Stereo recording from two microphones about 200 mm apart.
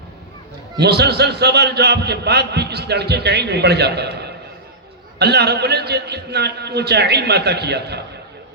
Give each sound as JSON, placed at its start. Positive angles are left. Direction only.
{"t": 0.8, "sound": "a man's voice", "side_deg": -55}